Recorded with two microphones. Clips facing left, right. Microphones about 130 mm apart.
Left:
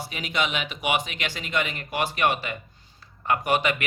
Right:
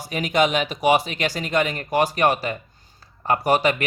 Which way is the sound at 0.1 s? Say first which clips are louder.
Right 9 dB; 45° right (ahead or behind).